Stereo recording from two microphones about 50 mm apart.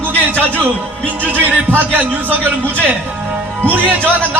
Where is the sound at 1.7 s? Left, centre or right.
Right.